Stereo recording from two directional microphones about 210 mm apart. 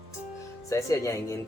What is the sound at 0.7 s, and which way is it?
Speech, 15° left (ahead or behind).